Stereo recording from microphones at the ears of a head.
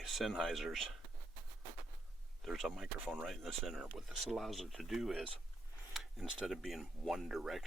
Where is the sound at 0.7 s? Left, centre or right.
Right.